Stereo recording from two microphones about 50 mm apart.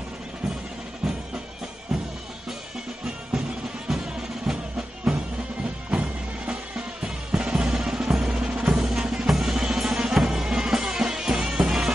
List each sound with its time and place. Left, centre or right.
1.9 s music: centre
3.3 s music: centre
5.9 s music: right
8.5 s drum: centre